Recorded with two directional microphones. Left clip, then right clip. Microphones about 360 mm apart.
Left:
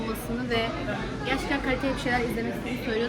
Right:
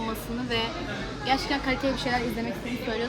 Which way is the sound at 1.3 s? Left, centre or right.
Right.